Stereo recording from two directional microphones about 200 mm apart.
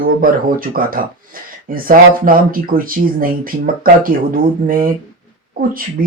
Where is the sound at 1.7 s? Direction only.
45° right (ahead or behind).